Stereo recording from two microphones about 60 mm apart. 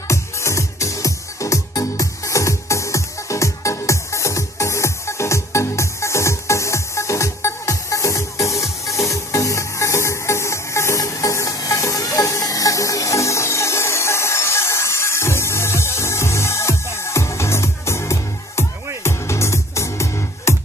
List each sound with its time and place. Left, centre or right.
0.1 s music: left